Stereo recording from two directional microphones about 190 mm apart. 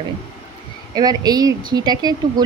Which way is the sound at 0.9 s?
20° right (ahead or behind).